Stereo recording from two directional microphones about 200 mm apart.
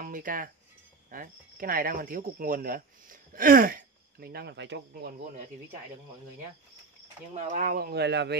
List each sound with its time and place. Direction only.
0.0 s speech: 45° right (ahead or behind); by 5.1 s 60° right (ahead or behind)
5.2 s speech: 40° right (ahead or behind)
7.3 s speech: 40° right (ahead or behind); by 8.4 s 55° right (ahead or behind)